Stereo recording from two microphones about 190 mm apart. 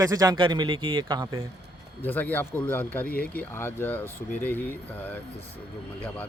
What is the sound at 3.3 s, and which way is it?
Speech, 10° left (ahead or behind).